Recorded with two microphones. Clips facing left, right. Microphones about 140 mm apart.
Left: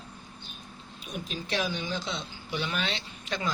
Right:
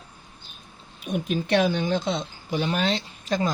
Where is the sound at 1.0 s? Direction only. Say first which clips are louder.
Right 10 dB; 60° right (ahead or behind).